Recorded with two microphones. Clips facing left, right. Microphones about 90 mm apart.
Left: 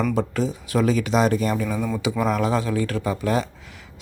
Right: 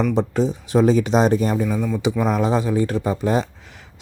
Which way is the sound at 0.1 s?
20° right (ahead or behind).